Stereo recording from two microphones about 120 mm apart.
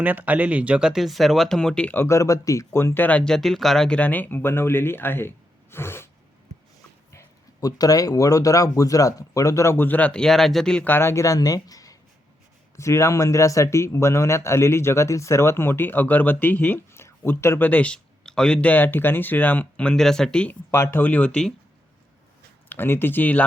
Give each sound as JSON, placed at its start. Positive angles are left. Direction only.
{"t": 0.0, "sound": "speech", "side_deg": -15}
{"t": 5.7, "sound": "a sound", "side_deg": 20}
{"t": 7.1, "sound": "speech", "side_deg": 25}
{"t": 20.7, "sound": "speech", "side_deg": 20}
{"t": 22.7, "sound": "speech", "side_deg": 20}